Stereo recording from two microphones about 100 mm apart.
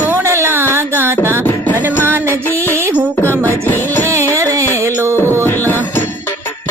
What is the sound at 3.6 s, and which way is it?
Music, 20° left (ahead or behind).